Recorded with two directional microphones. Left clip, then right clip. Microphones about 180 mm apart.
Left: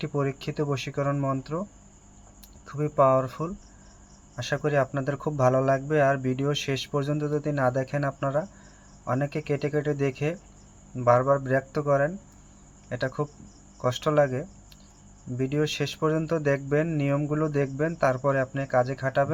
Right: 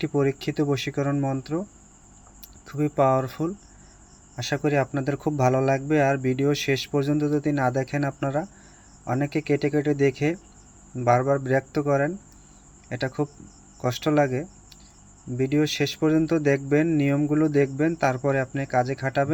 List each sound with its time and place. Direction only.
0.0 s speech: 15° right (ahead or behind)
2.6 s speech: 15° right (ahead or behind)